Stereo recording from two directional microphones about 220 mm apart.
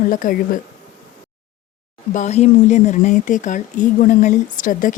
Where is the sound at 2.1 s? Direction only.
30° left (ahead or behind).